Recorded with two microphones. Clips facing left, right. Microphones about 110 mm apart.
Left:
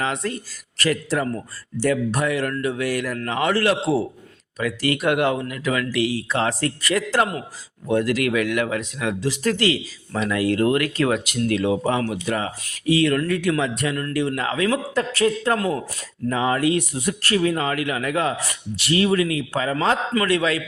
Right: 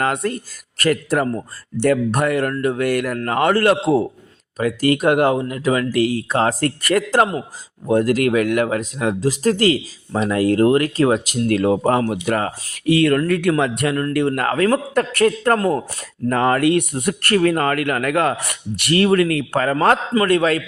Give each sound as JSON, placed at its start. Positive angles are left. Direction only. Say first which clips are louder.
{"t": 0.0, "sound": "speech", "louder": "right 5 dB", "side_deg": -50}
{"t": 11.4, "sound": "speech", "louder": "right 4 dB", "side_deg": -45}
{"t": 15.5, "sound": "speech", "louder": "right 5 dB", "side_deg": -40}
{"t": 16.3, "sound": "speech", "louder": "right 4 dB", "side_deg": -60}
{"t": 20.1, "sound": "speech", "louder": "right 4 dB", "side_deg": -45}